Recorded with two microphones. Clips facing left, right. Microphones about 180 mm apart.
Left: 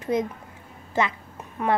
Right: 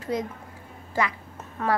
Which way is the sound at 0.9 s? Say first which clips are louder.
Left 2 dB; 20° left (ahead or behind).